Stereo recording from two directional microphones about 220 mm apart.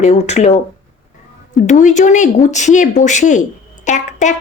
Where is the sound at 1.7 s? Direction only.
35° left (ahead or behind).